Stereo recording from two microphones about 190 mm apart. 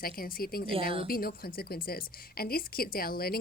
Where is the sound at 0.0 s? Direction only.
50° left (ahead or behind).